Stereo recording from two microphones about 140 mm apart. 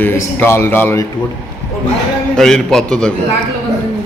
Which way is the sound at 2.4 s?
5° left (ahead or behind).